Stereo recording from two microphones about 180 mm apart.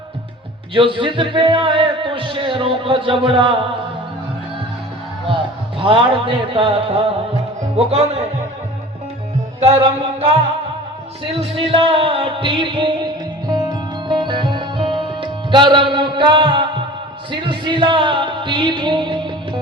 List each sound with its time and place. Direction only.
0.7 s speech: 30° right (ahead or behind)
5.8 s speech: 30° right (ahead or behind)
7.9 s music: 35° right (ahead or behind)
9.6 s music: 30° right (ahead or behind)
11.3 s music: 30° right (ahead or behind)
17.3 s speech: 25° right (ahead or behind)